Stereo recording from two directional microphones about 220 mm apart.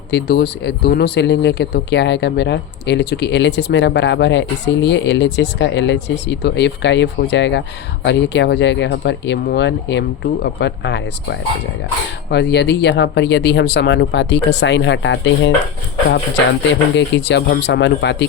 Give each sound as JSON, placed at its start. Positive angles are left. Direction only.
{"t": 0.1, "sound": "speech", "side_deg": 50}
{"t": 16.9, "sound": "speech", "side_deg": 50}